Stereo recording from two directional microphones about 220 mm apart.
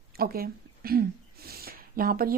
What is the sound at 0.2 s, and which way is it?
Speech, 45° right (ahead or behind).